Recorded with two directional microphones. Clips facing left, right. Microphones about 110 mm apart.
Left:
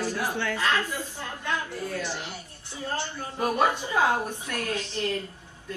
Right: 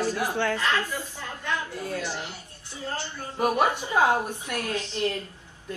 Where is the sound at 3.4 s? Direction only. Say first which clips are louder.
Right 1 dB; 15° right (ahead or behind).